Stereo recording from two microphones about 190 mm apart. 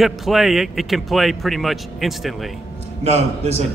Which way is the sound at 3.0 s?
35° right (ahead or behind).